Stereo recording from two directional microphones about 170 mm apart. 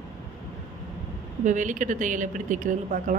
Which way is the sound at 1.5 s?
50° right (ahead or behind).